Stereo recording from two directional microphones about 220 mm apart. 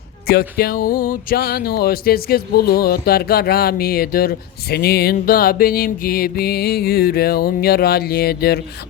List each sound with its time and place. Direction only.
0.3 s speech: 45° left (ahead or behind)